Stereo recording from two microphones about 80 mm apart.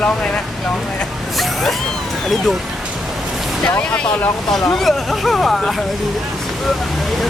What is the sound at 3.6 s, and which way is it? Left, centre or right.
Speech, left.